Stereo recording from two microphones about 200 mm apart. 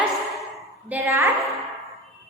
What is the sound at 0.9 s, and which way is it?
Speech, 10° right (ahead or behind).